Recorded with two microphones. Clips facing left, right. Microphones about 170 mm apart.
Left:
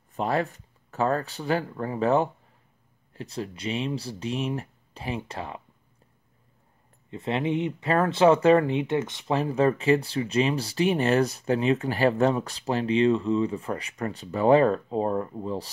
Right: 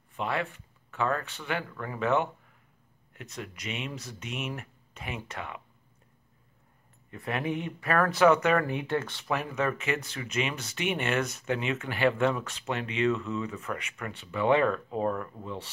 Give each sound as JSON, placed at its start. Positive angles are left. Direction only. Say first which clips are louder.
{"t": 0.1, "sound": "speech", "louder": "left 5 dB", "side_deg": 40}
{"t": 7.1, "sound": "speech", "louder": "left 5 dB", "side_deg": 25}
{"t": 9.3, "sound": "speech", "louder": "left 7 dB", "side_deg": 30}